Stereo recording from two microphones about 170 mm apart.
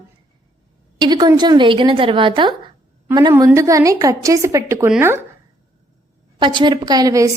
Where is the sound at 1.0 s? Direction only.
25° right (ahead or behind).